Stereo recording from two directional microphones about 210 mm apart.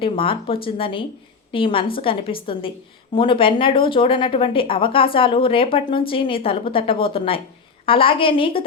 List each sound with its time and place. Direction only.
0.0 s a woman's voice: 25° left (ahead or behind)